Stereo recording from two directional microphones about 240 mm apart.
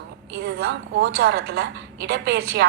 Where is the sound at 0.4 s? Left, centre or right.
Right.